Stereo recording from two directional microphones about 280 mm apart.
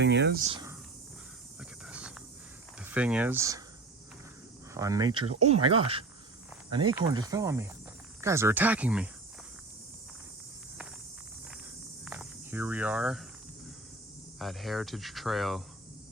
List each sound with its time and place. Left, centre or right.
0.0 s speech: right
0.4 s speech: centre
1.8 s a sound: centre
2.8 s speech: centre
4.7 s speech: centre
12.0 s cricket: centre
14.3 s speech: centre